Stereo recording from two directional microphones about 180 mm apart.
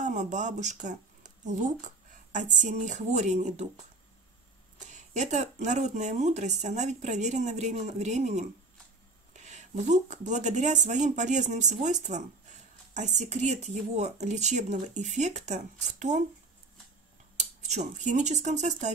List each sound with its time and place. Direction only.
0.0 s speech: 40° right (ahead or behind)
4.9 s speech: 40° right (ahead or behind)
17.4 s speech: 40° right (ahead or behind)